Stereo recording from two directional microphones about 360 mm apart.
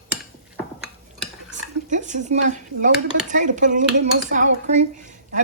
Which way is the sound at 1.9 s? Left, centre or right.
Centre.